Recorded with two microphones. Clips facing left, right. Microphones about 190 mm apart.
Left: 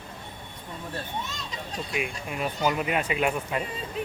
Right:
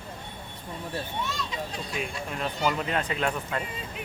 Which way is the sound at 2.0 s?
10° left (ahead or behind).